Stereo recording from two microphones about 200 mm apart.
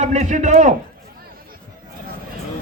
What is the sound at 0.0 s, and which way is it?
Speech, 35° right (ahead or behind).